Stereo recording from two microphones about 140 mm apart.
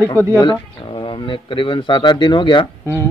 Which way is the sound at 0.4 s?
35° left (ahead or behind).